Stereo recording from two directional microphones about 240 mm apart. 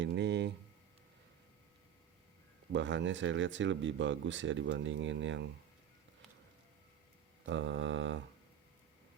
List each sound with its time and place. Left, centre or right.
0.0 s speech: right
2.7 s speech: right
7.4 s speech: right